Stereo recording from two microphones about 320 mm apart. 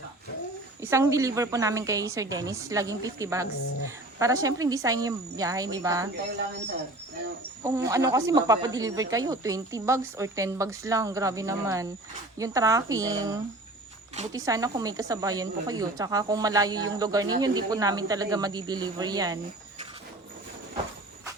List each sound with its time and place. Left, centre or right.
0.8 s a woman's voice: centre
7.9 s a woman's voice: centre